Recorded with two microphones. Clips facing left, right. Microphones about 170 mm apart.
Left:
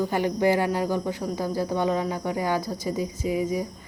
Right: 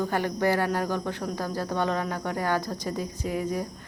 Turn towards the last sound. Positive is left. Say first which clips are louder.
# left 3 dB
turn(degrees=10)  # may be behind; listen again after turning